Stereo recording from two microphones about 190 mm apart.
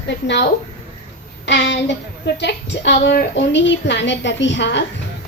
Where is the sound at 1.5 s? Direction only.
70° left (ahead or behind).